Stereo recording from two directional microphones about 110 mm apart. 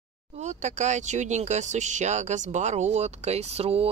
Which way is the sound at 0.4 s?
90° right.